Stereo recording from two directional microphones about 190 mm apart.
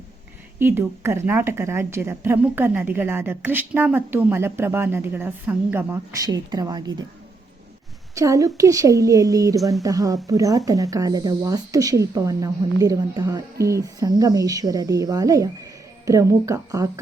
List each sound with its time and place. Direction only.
0.6 s speech: 10° right (ahead or behind)
8.1 s speech: 15° right (ahead or behind)